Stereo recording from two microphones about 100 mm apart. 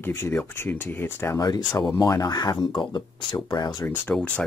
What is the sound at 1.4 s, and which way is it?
Speech, 40° left (ahead or behind).